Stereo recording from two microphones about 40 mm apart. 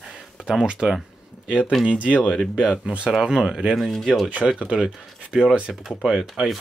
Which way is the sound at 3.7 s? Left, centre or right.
Centre.